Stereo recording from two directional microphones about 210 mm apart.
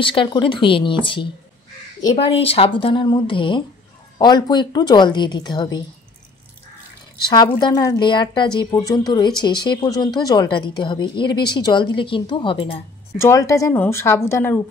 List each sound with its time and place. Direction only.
0.0 s a woman's voice: 25° left (ahead or behind)
7.2 s a woman's voice: 20° left (ahead or behind)
13.2 s speech: 15° left (ahead or behind)